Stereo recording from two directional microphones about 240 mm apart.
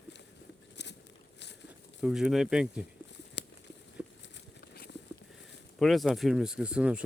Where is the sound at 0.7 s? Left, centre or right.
Left.